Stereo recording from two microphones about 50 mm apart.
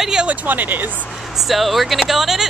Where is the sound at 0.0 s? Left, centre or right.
Centre.